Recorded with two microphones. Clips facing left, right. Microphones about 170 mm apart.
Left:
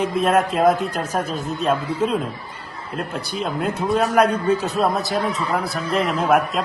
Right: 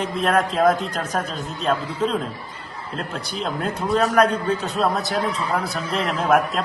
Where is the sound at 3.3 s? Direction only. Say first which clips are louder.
Left 2 dB; centre (ahead or behind).